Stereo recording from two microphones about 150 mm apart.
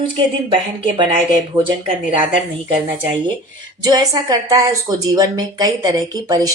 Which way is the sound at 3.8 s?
25° right (ahead or behind).